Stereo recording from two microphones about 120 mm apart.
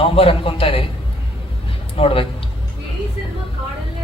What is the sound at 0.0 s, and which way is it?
Speech, 50° left (ahead or behind).